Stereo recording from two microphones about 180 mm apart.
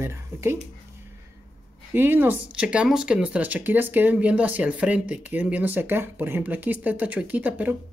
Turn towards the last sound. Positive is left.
turn(degrees=-10)  # may be behind; listen again after turning